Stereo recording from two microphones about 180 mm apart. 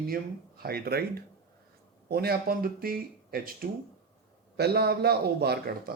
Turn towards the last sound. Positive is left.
turn(degrees=-60)  # may be behind; listen again after turning